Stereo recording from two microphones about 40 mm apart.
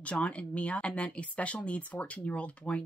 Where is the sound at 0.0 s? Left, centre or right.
Left.